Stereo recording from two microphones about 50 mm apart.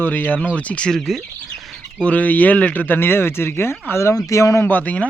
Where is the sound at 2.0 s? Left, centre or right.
Left.